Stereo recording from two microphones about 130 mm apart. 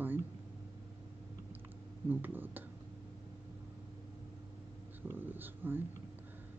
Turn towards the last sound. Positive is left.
turn(degrees=-15)  # may be behind; listen again after turning